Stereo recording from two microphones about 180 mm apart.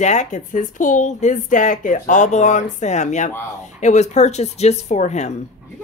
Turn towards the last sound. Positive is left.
turn(degrees=40)  # may be behind; listen again after turning